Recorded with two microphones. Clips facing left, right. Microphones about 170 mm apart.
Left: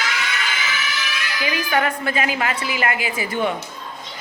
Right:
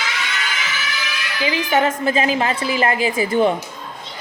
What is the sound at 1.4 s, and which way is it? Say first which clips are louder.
Speech: right 4 dB; 20° right (ahead or behind).